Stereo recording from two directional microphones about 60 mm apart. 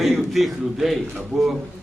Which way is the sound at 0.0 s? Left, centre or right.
Centre.